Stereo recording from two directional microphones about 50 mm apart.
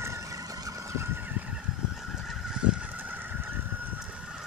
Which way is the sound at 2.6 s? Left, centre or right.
Right.